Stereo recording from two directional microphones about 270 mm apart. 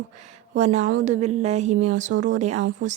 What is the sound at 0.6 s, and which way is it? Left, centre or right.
A woman's voice, right.